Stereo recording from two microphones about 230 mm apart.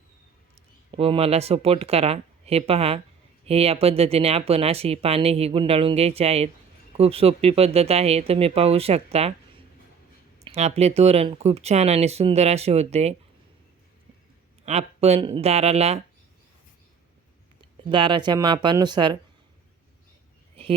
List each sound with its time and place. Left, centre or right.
0.9 s speech: right
10.4 s speech: right
14.6 s speech: right
17.6 s speech: right